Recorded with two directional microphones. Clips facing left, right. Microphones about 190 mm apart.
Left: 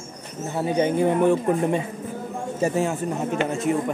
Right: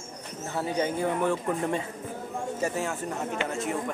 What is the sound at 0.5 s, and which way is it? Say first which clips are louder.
Speech: left 7 dB; 20° left (ahead or behind).